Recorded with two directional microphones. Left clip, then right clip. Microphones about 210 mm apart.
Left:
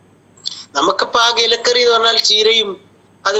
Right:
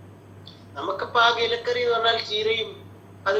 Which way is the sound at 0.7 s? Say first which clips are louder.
Left 10 dB; 60° left (ahead or behind).